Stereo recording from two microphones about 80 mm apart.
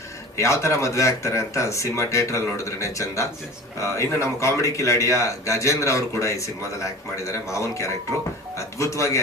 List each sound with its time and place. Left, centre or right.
0.3 s a man's voice: left